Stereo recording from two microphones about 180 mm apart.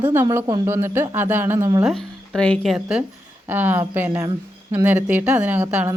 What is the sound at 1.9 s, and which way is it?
Speech, centre (ahead or behind).